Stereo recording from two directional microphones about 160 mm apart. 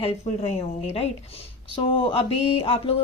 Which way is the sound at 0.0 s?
45° left (ahead or behind).